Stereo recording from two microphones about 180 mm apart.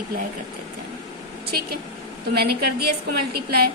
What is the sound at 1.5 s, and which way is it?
A woman's voice, 60° right (ahead or behind).